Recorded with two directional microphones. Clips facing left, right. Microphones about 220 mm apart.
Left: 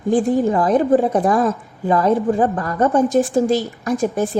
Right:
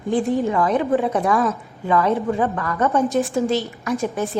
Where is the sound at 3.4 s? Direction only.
45° left (ahead or behind).